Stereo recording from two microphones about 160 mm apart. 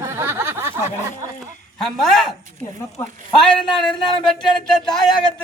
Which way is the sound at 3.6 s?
5° left (ahead or behind).